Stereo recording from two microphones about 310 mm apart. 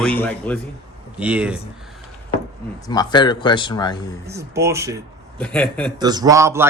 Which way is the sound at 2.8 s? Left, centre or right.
Centre.